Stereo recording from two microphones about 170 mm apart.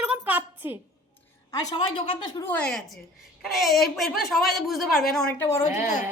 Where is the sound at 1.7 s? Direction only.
30° left (ahead or behind).